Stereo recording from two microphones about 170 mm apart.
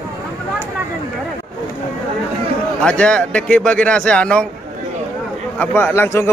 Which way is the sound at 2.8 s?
5° left (ahead or behind).